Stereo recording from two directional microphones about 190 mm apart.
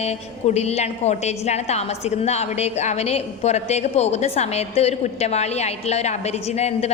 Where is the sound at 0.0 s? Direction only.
35° left (ahead or behind).